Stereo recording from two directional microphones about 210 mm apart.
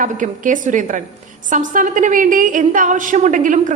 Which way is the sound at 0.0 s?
40° right (ahead or behind).